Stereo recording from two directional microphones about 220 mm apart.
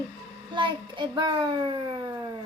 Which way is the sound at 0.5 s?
20° right (ahead or behind).